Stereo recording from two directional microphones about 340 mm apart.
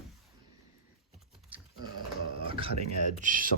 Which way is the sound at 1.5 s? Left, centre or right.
Centre.